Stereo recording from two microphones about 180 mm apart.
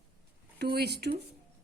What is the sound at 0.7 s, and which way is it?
Speech, 65° right (ahead or behind).